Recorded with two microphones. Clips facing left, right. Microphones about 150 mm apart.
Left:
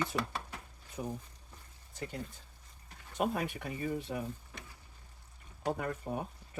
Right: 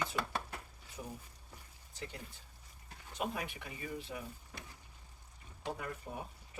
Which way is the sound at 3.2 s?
50° left (ahead or behind).